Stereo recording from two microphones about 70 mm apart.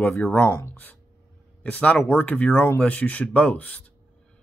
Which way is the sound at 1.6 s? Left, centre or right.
Centre.